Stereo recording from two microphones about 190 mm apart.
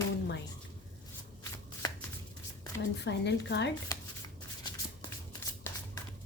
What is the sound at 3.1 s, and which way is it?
Speech, 65° left (ahead or behind).